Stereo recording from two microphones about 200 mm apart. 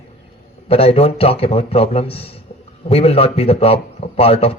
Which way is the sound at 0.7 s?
30° left (ahead or behind).